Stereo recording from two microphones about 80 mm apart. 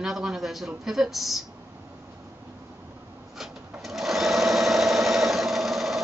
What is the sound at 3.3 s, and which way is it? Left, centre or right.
Sewing machine, centre.